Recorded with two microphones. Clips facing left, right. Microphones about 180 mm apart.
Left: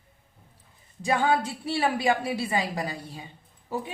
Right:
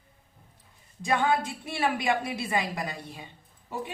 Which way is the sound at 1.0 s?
35° left (ahead or behind).